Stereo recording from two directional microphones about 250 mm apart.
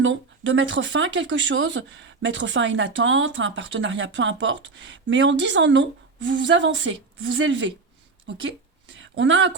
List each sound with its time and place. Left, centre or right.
0.0 s speech: right